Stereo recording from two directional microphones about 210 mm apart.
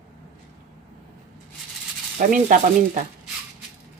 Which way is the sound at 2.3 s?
40° right (ahead or behind).